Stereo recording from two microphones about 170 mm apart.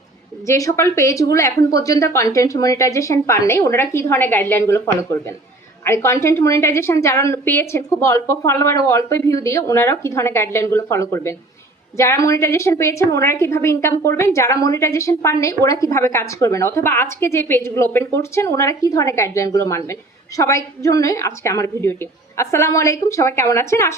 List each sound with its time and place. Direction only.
0.4 s a woman's voice: 20° left (ahead or behind)
5.8 s a woman's voice: 15° left (ahead or behind)